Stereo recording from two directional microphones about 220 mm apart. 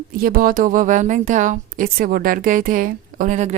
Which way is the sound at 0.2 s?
40° right (ahead or behind).